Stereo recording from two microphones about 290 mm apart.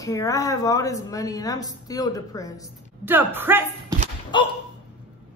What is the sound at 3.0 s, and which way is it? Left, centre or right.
Speech, centre.